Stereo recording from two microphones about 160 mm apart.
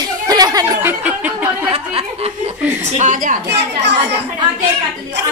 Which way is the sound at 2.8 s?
45° right (ahead or behind).